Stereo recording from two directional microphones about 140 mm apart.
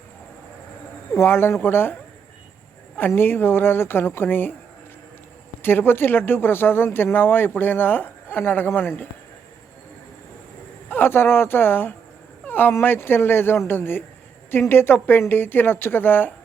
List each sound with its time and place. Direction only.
1.1 s speech: 15° left (ahead or behind)
3.0 s speech: 15° left (ahead or behind)
5.6 s speech: 15° left (ahead or behind)
10.8 s speech: 15° left (ahead or behind)